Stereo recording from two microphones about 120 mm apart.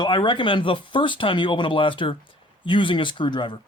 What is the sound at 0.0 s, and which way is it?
Speech, 40° left (ahead or behind).